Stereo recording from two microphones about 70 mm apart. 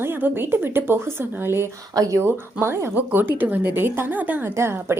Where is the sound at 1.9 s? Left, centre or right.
Right.